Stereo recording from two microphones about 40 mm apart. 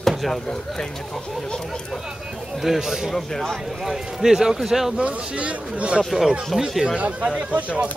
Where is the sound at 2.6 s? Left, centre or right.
Centre.